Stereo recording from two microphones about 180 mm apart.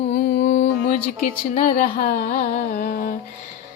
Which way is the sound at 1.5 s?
50° left (ahead or behind).